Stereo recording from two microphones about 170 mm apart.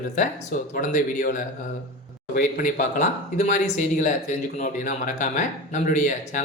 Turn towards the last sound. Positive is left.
turn(degrees=45)  # may be behind; listen again after turning